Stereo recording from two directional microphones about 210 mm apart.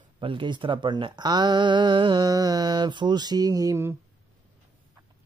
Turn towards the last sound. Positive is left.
turn(degrees=-15)  # may be behind; listen again after turning